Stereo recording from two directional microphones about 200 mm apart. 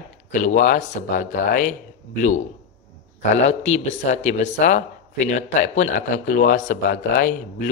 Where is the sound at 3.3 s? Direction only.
35° left (ahead or behind).